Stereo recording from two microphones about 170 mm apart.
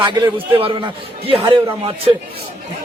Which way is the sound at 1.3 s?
35° right (ahead or behind).